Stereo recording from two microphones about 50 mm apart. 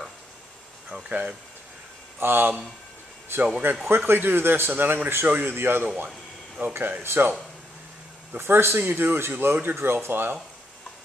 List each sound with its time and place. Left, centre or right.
1.0 s speech: right
2.1 s speech: right
8.4 s speech: right
8.7 s speech: right